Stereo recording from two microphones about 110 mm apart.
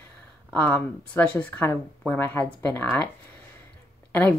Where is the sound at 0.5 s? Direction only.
15° left (ahead or behind).